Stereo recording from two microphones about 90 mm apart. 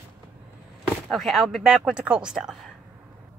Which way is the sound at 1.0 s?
Centre (ahead or behind).